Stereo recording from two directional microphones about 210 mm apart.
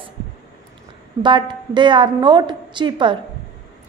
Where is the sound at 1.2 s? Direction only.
20° right (ahead or behind).